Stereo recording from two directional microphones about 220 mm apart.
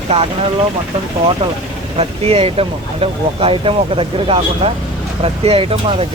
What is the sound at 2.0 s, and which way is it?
Speech, 25° right (ahead or behind).